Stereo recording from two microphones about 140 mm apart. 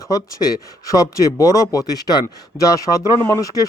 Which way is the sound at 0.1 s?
25° left (ahead or behind).